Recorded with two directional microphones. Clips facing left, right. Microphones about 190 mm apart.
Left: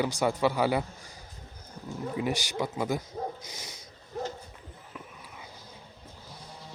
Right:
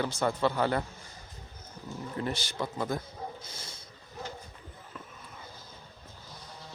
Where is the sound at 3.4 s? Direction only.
15° left (ahead or behind).